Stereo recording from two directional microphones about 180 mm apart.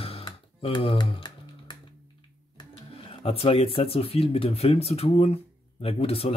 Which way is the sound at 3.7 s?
35° left (ahead or behind).